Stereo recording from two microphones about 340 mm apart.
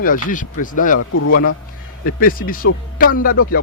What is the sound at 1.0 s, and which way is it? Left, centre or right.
Speech, left.